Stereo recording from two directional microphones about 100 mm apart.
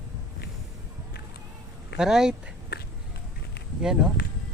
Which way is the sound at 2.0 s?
5° right (ahead or behind).